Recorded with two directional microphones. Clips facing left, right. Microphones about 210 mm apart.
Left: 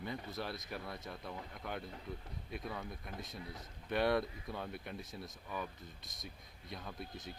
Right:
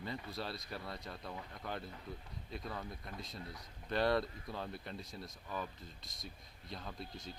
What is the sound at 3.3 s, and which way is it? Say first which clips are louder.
Speech: left 1 dB; 20° left (ahead or behind).